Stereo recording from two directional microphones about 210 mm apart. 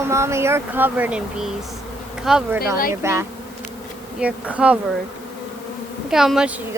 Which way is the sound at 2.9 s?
15° right (ahead or behind).